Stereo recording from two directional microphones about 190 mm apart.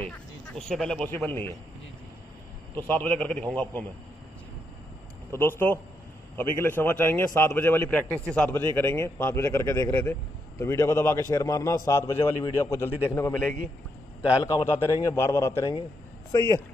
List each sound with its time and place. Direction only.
0.6 s speech: 5° left (ahead or behind)
2.7 s a man's voice: 10° left (ahead or behind)
5.3 s a man's voice: 10° left (ahead or behind)
14.4 s a man's voice: 15° left (ahead or behind)